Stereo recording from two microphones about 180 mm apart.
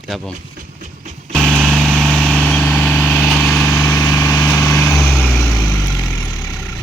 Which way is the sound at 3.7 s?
15° left (ahead or behind).